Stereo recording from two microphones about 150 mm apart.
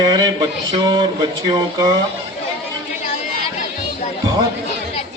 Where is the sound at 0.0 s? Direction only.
30° right (ahead or behind).